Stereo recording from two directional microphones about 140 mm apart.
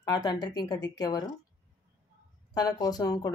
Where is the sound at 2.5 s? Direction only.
25° left (ahead or behind).